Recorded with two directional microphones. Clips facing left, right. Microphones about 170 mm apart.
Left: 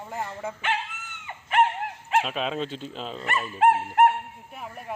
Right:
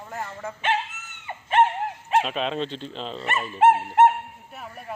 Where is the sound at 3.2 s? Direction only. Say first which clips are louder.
Right 3 dB; 20° right (ahead or behind).